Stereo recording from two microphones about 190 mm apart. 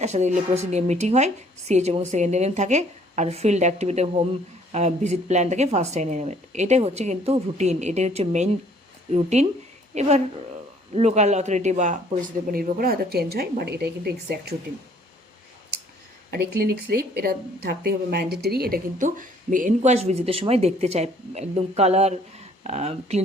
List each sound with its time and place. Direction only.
0.0 s speech: 35° right (ahead or behind); by 14.5 s 55° right (ahead or behind)
16.3 s speech: 55° right (ahead or behind); by 23.2 s 35° right (ahead or behind)